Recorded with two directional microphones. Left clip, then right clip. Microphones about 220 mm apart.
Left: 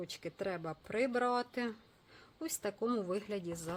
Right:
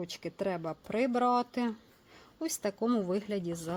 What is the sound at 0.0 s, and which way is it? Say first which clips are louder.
A woman's voice: right 5 dB; 35° right (ahead or behind).